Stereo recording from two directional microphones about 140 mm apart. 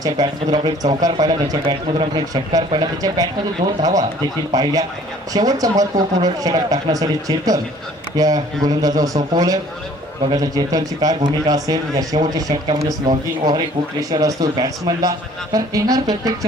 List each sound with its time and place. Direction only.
0.0 s speech: 30° right (ahead or behind)
5.3 s speech: 25° right (ahead or behind)